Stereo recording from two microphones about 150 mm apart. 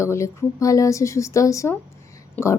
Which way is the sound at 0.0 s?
20° left (ahead or behind).